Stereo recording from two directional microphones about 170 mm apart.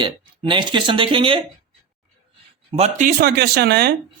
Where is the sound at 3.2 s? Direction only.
65° right (ahead or behind).